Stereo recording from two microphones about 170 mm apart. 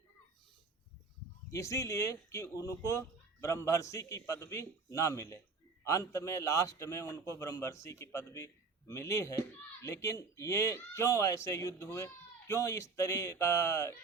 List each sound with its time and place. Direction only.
1.5 s a man's voice: 15° left (ahead or behind)